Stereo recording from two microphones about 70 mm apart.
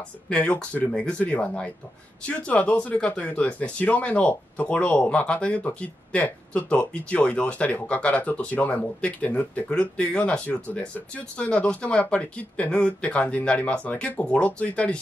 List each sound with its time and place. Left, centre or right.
0.3 s speech: centre